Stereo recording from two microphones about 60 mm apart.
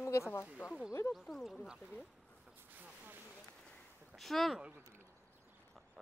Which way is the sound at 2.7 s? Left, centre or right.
Right.